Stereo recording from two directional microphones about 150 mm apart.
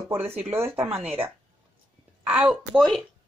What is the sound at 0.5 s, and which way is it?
Speech, 15° right (ahead or behind).